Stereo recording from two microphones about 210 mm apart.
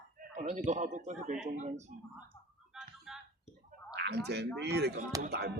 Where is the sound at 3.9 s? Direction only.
55° right (ahead or behind).